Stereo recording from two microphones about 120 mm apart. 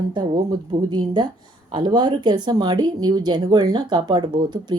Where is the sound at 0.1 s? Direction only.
40° right (ahead or behind).